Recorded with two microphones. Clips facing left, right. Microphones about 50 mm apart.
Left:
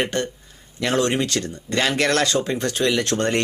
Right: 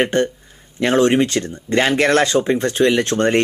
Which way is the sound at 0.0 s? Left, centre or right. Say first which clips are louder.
Right 6 dB; right.